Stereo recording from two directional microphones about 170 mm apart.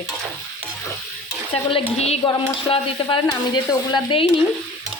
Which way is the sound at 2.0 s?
35° left (ahead or behind).